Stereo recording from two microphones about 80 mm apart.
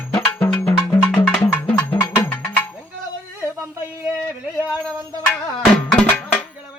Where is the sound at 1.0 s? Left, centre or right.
Centre.